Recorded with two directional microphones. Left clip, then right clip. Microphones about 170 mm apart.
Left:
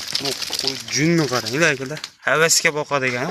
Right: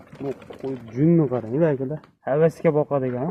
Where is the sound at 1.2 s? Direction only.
30° left (ahead or behind).